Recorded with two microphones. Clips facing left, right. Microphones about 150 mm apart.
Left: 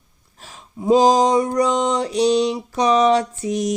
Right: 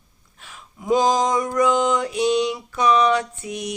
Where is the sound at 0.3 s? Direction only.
35° left (ahead or behind).